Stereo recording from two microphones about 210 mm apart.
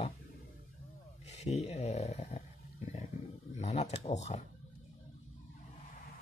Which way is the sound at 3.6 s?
30° left (ahead or behind).